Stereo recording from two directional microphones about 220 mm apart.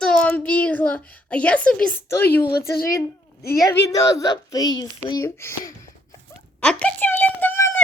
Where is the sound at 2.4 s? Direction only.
45° left (ahead or behind).